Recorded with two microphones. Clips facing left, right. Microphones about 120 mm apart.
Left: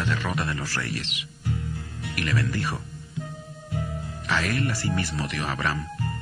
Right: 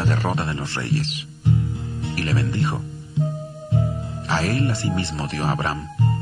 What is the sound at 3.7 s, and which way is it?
Speech, 30° right (ahead or behind).